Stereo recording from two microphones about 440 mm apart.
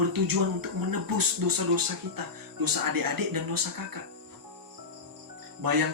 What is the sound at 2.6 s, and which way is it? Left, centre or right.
Speech, right.